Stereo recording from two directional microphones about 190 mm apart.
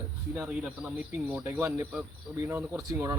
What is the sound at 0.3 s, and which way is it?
Speech, 5° right (ahead or behind).